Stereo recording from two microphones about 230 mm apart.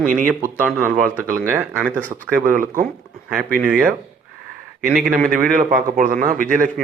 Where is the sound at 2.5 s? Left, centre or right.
Right.